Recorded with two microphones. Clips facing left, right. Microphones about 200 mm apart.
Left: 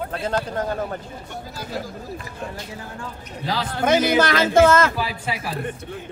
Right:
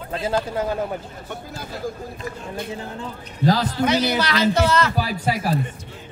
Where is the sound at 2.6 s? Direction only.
20° right (ahead or behind).